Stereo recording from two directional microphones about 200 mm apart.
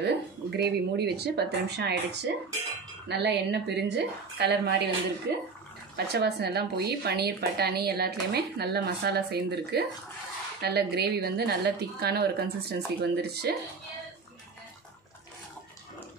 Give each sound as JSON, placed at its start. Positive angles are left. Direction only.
{"t": 0.0, "sound": "a woman's voice", "side_deg": -55}